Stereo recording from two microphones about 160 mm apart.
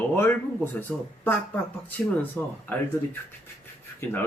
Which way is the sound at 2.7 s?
10° left (ahead or behind).